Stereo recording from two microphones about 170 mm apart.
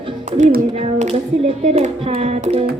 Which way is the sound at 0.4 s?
45° right (ahead or behind).